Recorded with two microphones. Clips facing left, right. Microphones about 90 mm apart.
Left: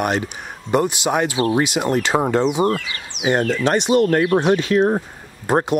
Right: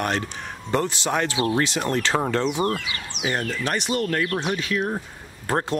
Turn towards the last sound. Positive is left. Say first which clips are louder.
# left 6 dB
turn(degrees=20)  # may be behind; listen again after turning